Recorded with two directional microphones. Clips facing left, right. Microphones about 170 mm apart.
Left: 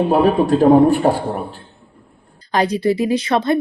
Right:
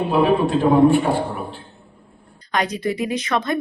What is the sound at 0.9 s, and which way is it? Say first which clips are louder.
Speech: left 2 dB; 40° left (ahead or behind).